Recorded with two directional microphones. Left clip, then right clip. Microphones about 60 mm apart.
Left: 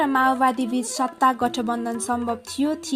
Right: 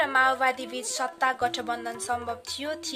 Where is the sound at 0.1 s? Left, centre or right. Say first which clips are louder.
Left 3 dB; left.